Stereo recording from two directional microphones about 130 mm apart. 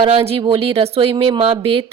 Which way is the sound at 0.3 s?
45° right (ahead or behind).